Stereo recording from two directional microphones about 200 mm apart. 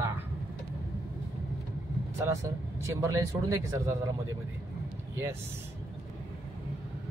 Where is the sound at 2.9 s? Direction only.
15° right (ahead or behind).